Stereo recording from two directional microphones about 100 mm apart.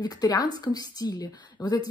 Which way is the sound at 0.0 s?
40° left (ahead or behind).